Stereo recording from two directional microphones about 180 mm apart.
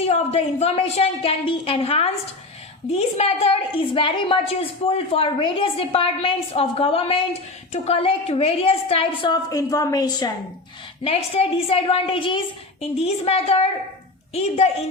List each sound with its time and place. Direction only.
0.0 s a woman's voice: 35° left (ahead or behind)
11.0 s a woman's voice: 35° left (ahead or behind)